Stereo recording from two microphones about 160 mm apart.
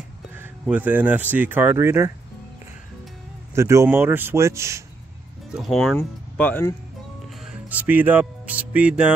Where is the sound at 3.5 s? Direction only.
20° right (ahead or behind).